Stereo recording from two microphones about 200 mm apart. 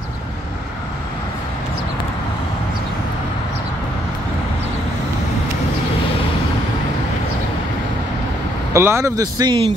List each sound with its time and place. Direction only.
8.7 s speech: 15° right (ahead or behind)